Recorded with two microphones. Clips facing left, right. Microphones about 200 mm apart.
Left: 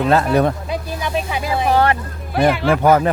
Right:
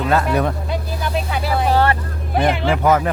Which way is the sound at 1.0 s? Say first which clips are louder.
Even; 15° left (ahead or behind).